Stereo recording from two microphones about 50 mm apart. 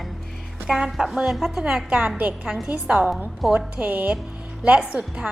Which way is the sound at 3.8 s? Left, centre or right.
Right.